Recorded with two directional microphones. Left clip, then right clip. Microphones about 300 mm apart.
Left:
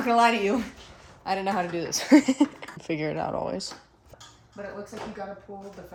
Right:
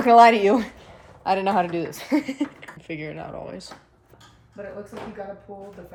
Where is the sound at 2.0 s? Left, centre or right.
Left.